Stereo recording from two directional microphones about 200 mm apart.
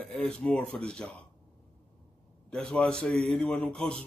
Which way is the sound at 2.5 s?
5° left (ahead or behind).